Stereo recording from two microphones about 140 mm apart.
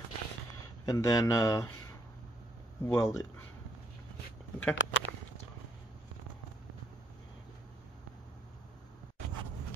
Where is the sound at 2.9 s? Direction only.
20° left (ahead or behind).